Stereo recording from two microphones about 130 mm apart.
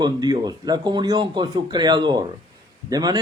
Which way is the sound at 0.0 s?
30° right (ahead or behind).